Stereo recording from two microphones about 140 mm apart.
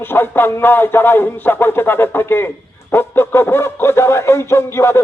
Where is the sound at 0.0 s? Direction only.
15° left (ahead or behind).